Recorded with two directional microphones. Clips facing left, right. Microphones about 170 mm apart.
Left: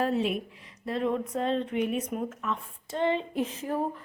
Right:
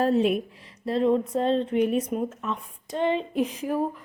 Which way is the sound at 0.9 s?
30° right (ahead or behind).